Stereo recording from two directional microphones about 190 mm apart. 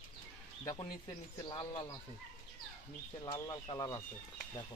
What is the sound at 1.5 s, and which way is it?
Speech, 25° left (ahead or behind).